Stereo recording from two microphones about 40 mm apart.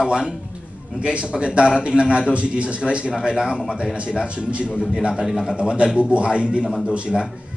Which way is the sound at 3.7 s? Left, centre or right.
Right.